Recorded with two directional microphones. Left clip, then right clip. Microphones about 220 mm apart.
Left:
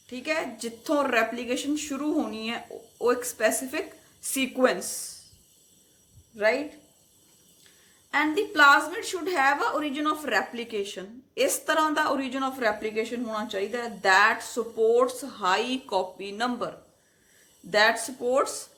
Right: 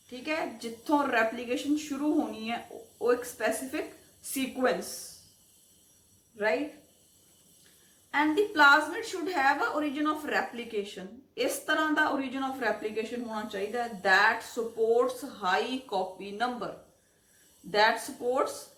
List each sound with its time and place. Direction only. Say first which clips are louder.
0.1 s a woman's voice: left 4 dB; 50° left (ahead or behind)
8.1 s a woman's voice: left 2 dB; 50° left (ahead or behind)
17.7 s a woman's voice: left 3 dB; 50° left (ahead or behind)